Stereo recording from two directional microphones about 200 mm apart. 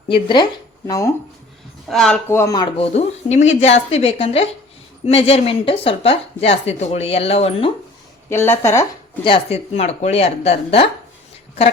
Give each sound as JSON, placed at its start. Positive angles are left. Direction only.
{"t": 0.1, "sound": "speech", "side_deg": 20}
{"t": 1.9, "sound": "speech", "side_deg": 0}
{"t": 2.7, "sound": "speech", "side_deg": 30}
{"t": 8.3, "sound": "speech", "side_deg": 10}
{"t": 9.2, "sound": "speech", "side_deg": 30}